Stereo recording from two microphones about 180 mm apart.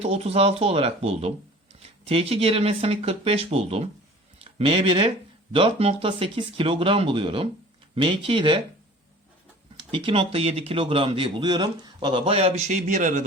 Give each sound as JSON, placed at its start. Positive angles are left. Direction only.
{"t": 0.0, "sound": "speech", "side_deg": -35}
{"t": 9.7, "sound": "speech", "side_deg": -30}